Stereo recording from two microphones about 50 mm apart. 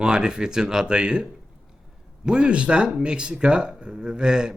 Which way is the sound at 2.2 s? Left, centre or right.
Centre.